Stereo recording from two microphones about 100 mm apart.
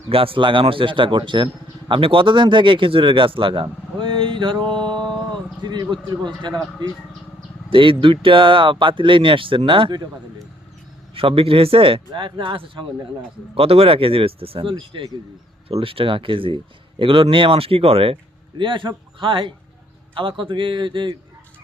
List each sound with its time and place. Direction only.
0.1 s speech: 65° right (ahead or behind)
4.9 s music: 10° left (ahead or behind)
5.3 s speech: 45° right (ahead or behind)
11.1 s speech: 65° right (ahead or behind)
13.6 s speech: 75° right (ahead or behind)
18.5 s speech: 55° right (ahead or behind)